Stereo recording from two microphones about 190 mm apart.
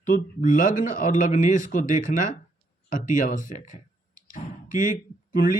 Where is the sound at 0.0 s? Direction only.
45° left (ahead or behind).